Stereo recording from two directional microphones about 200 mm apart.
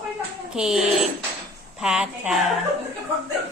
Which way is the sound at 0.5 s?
5° right (ahead or behind).